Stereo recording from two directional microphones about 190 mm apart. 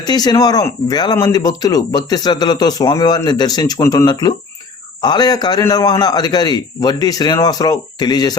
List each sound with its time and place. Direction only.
0.0 s speech: 20° left (ahead or behind)